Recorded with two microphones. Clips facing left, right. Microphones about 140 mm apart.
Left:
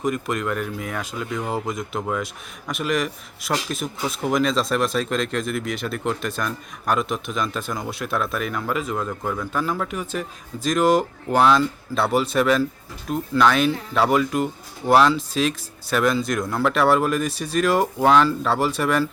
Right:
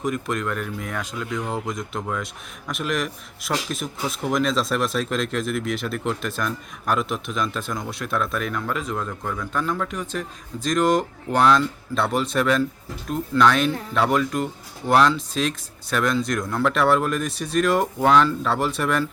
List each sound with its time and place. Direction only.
0.0 s speech: centre (ahead or behind)